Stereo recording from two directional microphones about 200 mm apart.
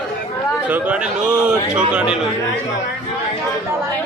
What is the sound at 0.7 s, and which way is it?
Speech, 5° right (ahead or behind).